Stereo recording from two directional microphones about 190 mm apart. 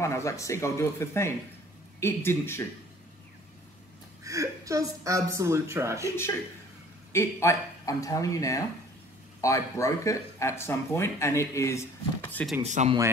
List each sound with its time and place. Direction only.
0.0 s speech: 15° left (ahead or behind)
4.2 s speech: 15° right (ahead or behind)
7.1 s speech: 15° left (ahead or behind)
12.6 s speech: 40° right (ahead or behind)